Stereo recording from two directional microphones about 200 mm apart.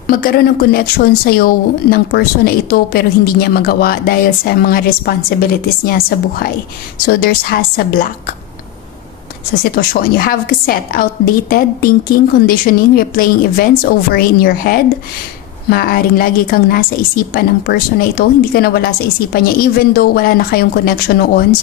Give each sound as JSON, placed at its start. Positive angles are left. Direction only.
{"t": 0.0, "sound": "a woman's voice", "side_deg": 50}
{"t": 9.6, "sound": "a woman's voice", "side_deg": 50}